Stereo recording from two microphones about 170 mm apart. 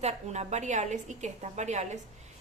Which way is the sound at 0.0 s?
40° right (ahead or behind).